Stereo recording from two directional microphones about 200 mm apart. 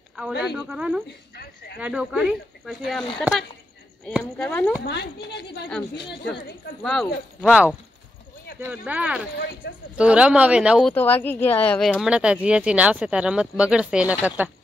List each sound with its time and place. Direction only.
0.3 s speech: 55° left (ahead or behind)
0.6 s speech: 5° right (ahead or behind)
1.0 s a woman's voice: 55° left (ahead or behind)
1.8 s speech: 5° right (ahead or behind)
4.8 s speech: 60° left (ahead or behind)
6.8 s speech: centre (ahead or behind)
9.6 s a woman's voice: 55° left (ahead or behind)
9.9 s speech: 5° right (ahead or behind)
11.0 s speech: 10° left (ahead or behind); by 14.5 s 10° right (ahead or behind)